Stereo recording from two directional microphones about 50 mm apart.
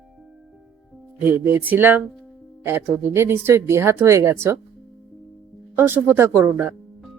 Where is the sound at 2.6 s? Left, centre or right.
Right.